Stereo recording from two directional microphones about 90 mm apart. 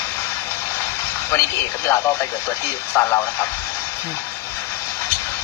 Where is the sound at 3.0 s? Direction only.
30° left (ahead or behind).